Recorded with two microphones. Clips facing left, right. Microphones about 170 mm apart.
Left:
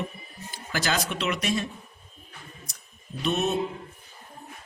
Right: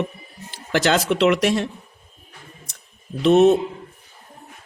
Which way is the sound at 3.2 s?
90° right.